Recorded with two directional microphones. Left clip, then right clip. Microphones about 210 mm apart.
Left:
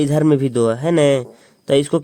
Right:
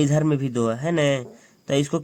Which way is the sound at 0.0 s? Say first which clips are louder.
Left 6 dB; 30° left (ahead or behind).